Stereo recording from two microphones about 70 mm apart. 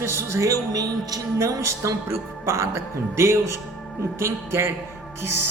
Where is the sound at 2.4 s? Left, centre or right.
Right.